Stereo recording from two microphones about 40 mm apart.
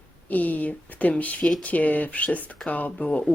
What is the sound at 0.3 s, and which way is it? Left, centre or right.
Speech, left.